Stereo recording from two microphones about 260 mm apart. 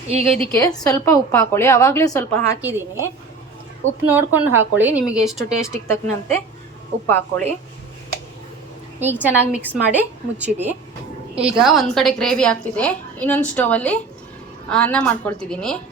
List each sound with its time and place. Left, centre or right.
0.1 s a woman's voice: right
0.5 s a woman's voice: centre
2.6 s a woman's voice: centre
5.7 s a woman's voice: centre
9.1 s a woman's voice: centre
9.5 s a woman's voice: centre